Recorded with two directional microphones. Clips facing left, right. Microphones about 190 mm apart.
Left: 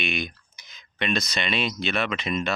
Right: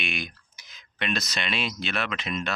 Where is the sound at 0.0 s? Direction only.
Centre (ahead or behind).